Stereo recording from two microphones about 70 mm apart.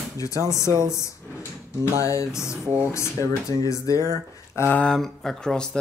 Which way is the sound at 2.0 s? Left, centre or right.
Left.